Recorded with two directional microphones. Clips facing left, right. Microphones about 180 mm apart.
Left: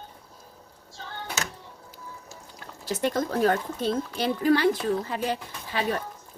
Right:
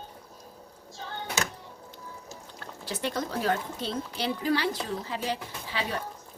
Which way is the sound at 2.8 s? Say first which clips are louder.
Left 5 dB; 50° left (ahead or behind).